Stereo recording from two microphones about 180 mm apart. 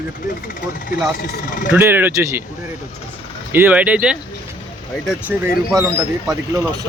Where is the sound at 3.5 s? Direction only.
10° right (ahead or behind).